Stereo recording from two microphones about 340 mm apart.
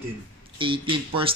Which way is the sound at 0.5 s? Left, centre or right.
Centre.